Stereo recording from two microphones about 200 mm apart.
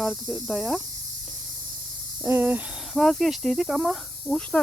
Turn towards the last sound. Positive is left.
turn(degrees=5)  # may be behind; listen again after turning